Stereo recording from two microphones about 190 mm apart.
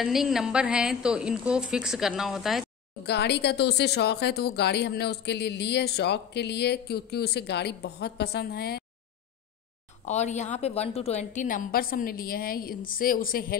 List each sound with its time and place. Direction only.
0.0 s a woman's voice: centre (ahead or behind)
3.1 s speech: 60° left (ahead or behind)
10.0 s a woman's voice: 35° left (ahead or behind)